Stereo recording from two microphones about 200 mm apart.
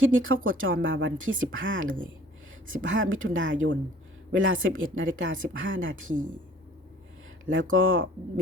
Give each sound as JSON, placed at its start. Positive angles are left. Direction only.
{"t": 0.0, "sound": "speech", "side_deg": -80}
{"t": 7.5, "sound": "speech", "side_deg": -80}